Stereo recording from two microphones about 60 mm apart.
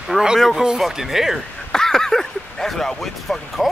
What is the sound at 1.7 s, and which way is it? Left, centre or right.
Speech, centre.